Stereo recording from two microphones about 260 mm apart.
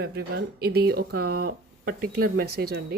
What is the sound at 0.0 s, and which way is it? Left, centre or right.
Speech, right.